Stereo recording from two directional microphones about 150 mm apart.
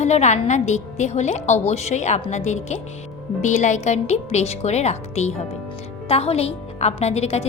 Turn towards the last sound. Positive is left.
turn(degrees=45)  # may be behind; listen again after turning